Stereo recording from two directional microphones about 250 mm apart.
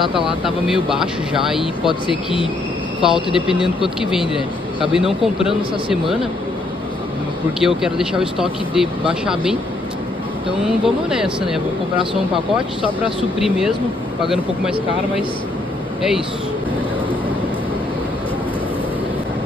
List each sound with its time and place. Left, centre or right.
0.8 s speech: centre
2.0 s speech: left
3.0 s speech: centre
7.6 s speech: centre
10.6 s speech: centre
13.4 s speech: centre